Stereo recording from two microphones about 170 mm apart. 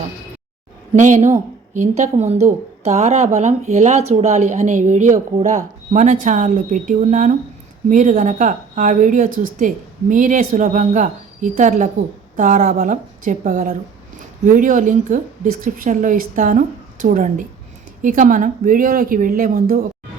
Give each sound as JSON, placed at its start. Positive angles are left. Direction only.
{"t": 0.9, "sound": "a woman's voice", "side_deg": -45}